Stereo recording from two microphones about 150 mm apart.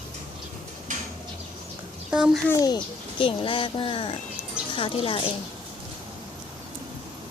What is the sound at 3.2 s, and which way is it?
Speech, 35° left (ahead or behind).